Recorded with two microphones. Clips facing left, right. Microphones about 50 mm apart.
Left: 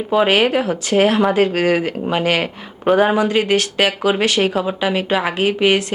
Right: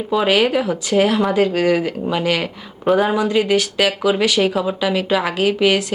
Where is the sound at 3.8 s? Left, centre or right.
Left.